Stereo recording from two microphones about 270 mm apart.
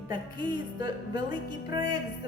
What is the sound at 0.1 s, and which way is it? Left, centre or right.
Speech, centre.